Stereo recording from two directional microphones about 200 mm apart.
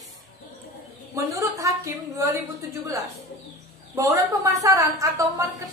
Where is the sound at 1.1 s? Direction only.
15° right (ahead or behind).